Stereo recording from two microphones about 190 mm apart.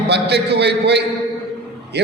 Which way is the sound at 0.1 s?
60° right (ahead or behind).